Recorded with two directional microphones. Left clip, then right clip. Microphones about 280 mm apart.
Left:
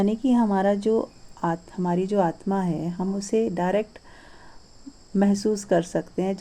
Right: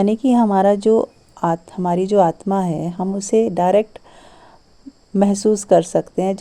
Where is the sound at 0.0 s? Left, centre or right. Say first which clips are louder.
Right 7 dB; right.